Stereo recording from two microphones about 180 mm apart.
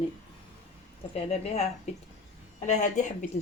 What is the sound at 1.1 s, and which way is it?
Speech, 35° left (ahead or behind).